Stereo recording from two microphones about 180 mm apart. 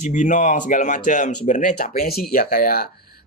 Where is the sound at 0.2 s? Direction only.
45° left (ahead or behind).